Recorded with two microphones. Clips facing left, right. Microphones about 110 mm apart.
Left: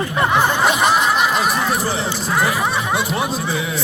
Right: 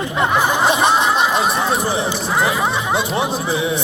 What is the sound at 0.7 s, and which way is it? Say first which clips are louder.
Speech: right 1 dB; 25° right (ahead or behind).